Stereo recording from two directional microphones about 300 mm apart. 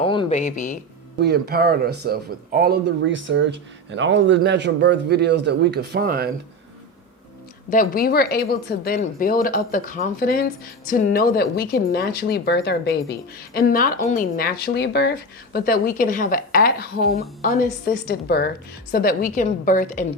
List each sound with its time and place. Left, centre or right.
0.0 s speech: centre
1.2 s speech: right
7.7 s a woman's voice: left